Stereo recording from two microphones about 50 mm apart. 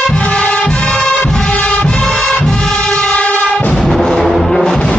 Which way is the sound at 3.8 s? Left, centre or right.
Centre.